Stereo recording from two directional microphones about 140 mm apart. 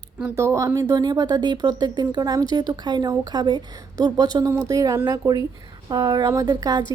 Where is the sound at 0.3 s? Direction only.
20° right (ahead or behind).